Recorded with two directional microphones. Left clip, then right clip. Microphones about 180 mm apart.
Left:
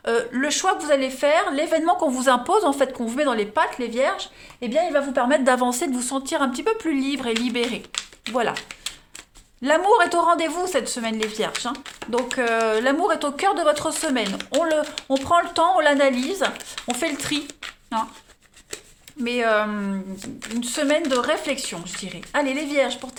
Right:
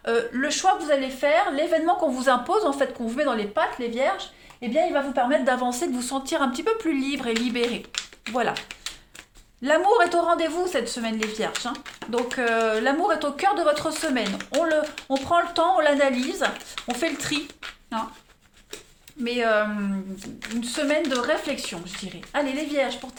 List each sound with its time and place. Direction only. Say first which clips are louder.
0.0 s speech: left 2 dB; 35° left (ahead or behind)
4.7 s a woman's voice: left 2 dB; 65° left (ahead or behind); by 7.8 s 30° left (ahead or behind)
7.9 s a sound: left 2 dB; 30° left (ahead or behind)
9.6 s speech: left 2 dB; 35° left (ahead or behind)
19.2 s speech: left 2 dB; 35° left (ahead or behind)